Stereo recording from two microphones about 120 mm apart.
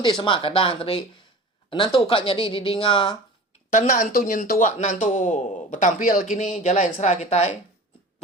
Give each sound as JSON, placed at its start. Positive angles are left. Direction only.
{"t": 0.0, "sound": "a woman's voice", "side_deg": 45}
{"t": 3.7, "sound": "a man's voice", "side_deg": 90}